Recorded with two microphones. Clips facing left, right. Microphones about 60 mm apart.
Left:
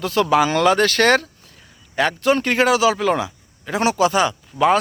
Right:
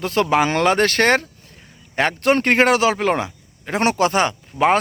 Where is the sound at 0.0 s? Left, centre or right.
Right.